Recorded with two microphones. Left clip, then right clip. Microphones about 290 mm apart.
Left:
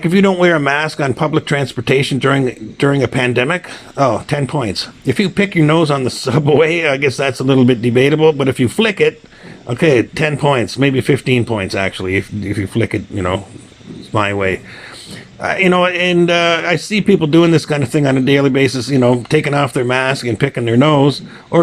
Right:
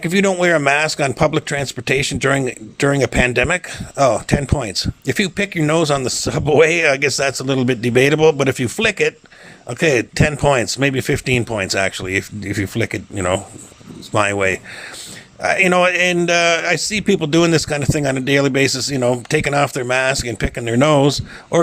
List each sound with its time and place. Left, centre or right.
0.0 s a man's voice: right